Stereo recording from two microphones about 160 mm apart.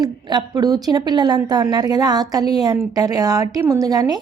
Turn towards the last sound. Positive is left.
turn(degrees=-25)  # may be behind; listen again after turning